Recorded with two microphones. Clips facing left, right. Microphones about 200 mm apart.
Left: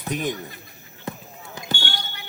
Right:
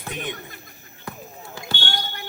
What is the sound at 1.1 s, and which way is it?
Basketball bounce, 25° left (ahead or behind).